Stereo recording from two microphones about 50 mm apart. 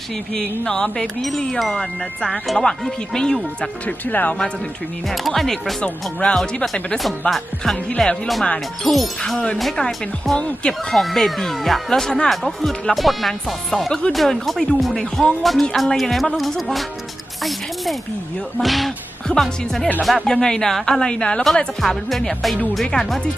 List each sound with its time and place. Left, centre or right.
0.6 s speech: centre
1.2 s speech: centre
3.8 s speech: left
5.0 s speech: centre
5.8 s speech: left
6.9 s speech: centre
8.8 s speech: centre
10.3 s speech: left
10.9 s speech: centre
18.5 s speech: centre
20.2 s speech: centre
21.0 s speech: centre
21.8 s speech: centre